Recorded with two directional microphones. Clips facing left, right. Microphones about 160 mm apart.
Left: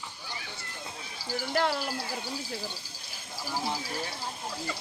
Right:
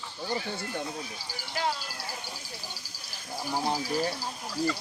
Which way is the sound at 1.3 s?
55° left (ahead or behind).